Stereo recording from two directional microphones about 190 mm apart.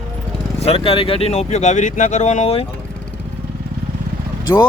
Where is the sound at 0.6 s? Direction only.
30° left (ahead or behind).